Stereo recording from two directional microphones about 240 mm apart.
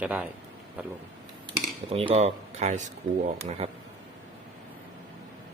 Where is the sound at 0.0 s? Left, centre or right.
Centre.